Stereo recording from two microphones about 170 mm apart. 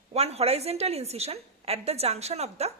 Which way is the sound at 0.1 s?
35° right (ahead or behind).